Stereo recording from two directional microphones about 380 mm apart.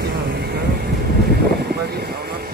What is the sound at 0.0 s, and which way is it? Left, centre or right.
Vehicle, right.